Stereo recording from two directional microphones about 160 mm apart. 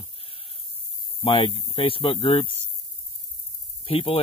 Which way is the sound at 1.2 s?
35° left (ahead or behind).